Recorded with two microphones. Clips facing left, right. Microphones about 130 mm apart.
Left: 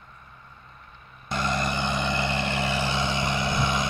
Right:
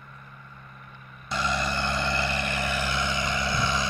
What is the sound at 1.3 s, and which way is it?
Vehicle, 50° left (ahead or behind).